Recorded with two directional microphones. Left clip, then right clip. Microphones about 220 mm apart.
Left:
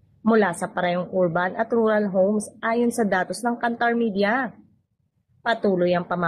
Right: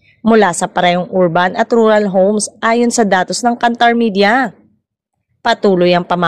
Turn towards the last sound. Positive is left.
turn(degrees=-45)  # may be behind; listen again after turning